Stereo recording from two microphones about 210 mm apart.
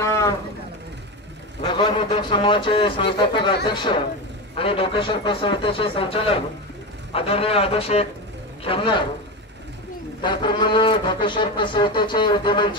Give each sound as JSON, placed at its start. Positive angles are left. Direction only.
{"t": 0.0, "sound": "vehicle", "side_deg": 15}
{"t": 1.6, "sound": "speech", "side_deg": 20}
{"t": 10.2, "sound": "speech", "side_deg": 20}